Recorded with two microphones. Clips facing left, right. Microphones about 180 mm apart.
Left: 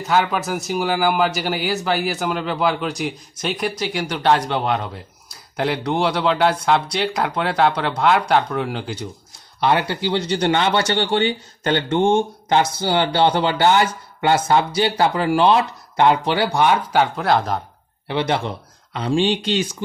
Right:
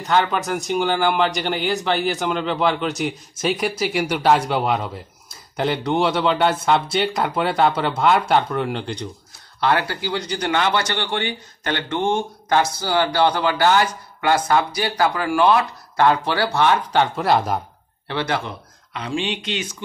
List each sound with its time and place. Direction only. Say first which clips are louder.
0.0 s a man's voice: even; 5° left (ahead or behind)
9.6 s speech: left 2 dB; 20° left (ahead or behind); by 17.6 s 5° right (ahead or behind)
18.0 s speech: left 3 dB; 20° left (ahead or behind)
18.9 s speech: left 6 dB; 35° left (ahead or behind)